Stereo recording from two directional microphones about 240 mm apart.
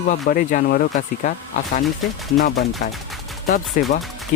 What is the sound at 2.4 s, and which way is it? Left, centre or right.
Speech, left.